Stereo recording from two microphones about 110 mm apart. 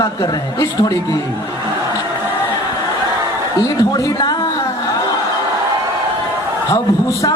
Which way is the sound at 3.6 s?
30° left (ahead or behind).